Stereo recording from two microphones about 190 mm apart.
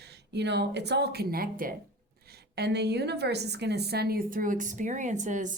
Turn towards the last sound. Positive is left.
turn(degrees=-40)  # may be behind; listen again after turning